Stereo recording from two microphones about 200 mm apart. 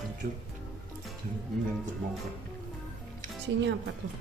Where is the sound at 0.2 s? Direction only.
45° right (ahead or behind).